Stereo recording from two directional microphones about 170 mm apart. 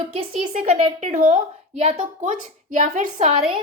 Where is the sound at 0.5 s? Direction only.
45° right (ahead or behind).